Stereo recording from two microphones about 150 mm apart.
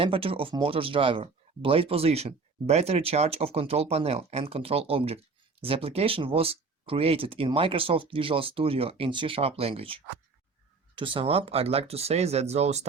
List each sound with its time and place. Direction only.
0.0 s speech: 40° right (ahead or behind)